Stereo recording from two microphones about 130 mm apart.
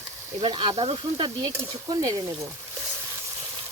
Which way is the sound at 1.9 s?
30° right (ahead or behind).